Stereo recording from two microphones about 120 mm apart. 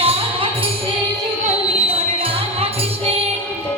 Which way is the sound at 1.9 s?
55° right (ahead or behind).